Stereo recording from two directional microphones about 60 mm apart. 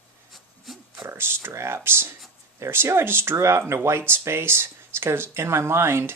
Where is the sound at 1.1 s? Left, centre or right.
Right.